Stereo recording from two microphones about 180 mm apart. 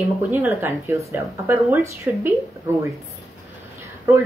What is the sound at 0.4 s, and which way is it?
A woman's voice, 15° right (ahead or behind).